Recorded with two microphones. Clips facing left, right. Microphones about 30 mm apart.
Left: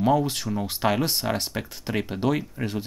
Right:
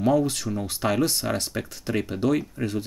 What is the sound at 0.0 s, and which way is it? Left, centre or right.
Speech, centre.